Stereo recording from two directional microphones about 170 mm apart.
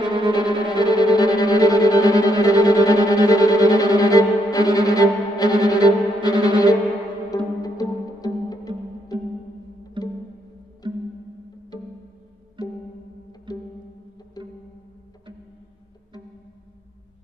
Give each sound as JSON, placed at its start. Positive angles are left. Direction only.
{"t": 0.0, "sound": "violin", "side_deg": -30}
{"t": 0.7, "sound": "music", "side_deg": 25}